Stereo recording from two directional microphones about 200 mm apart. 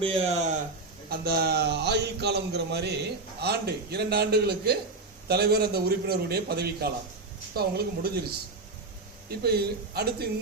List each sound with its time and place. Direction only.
0.0 s speech: 30° right (ahead or behind)
1.1 s a man's voice: 55° right (ahead or behind)
9.4 s a man's voice: 50° right (ahead or behind)